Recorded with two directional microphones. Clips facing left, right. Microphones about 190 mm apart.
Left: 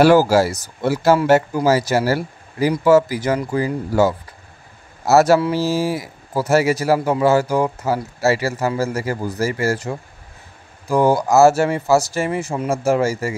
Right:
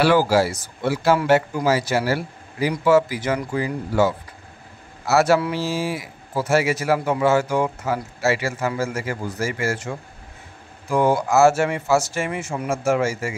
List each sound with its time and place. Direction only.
0.0 s speech: 45° left (ahead or behind)